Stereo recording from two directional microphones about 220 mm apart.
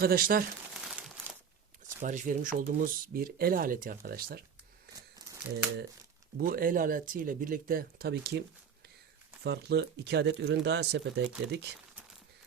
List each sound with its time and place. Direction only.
0.0 s speech: 40° right (ahead or behind)
0.7 s crumpling: 5° right (ahead or behind)
2.0 s speech: 35° right (ahead or behind)
4.9 s crumpling: 15° right (ahead or behind)
6.3 s speech: 40° right (ahead or behind)